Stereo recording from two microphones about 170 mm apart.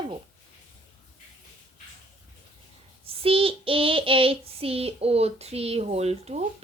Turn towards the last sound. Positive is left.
turn(degrees=-40)  # may be behind; listen again after turning